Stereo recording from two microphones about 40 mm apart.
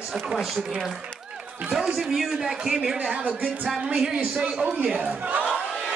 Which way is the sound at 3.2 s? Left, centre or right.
Right.